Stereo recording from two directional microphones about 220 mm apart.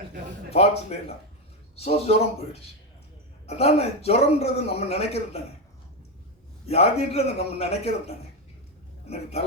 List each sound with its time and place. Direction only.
0.5 s a man's voice: 30° left (ahead or behind)
6.7 s a man's voice: 30° left (ahead or behind)